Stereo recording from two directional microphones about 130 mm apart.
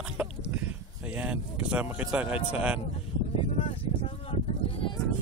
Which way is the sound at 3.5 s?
45° left (ahead or behind).